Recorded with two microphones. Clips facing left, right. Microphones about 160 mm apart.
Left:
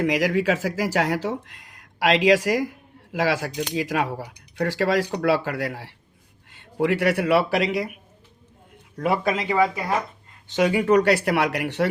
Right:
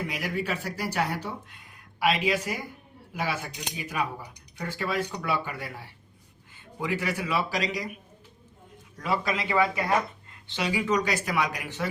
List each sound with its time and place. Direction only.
0.0 s speech: 90° left
6.5 s speech: 70° left (ahead or behind)
9.0 s speech: 55° left (ahead or behind)
10.5 s speech: 50° left (ahead or behind); by 11.9 s 70° left (ahead or behind)